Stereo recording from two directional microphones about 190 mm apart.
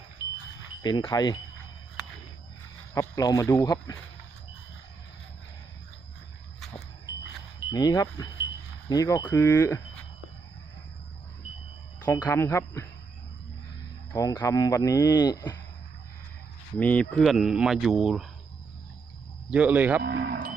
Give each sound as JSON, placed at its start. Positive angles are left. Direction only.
{"t": 0.8, "sound": "speech", "side_deg": 20}
{"t": 2.9, "sound": "speech", "side_deg": 15}
{"t": 7.7, "sound": "speech", "side_deg": 20}
{"t": 12.0, "sound": "speech", "side_deg": 10}
{"t": 14.1, "sound": "speech", "side_deg": 20}
{"t": 16.8, "sound": "speech", "side_deg": 5}
{"t": 19.5, "sound": "a man's voice", "side_deg": -5}
{"t": 20.0, "sound": "speech", "side_deg": -55}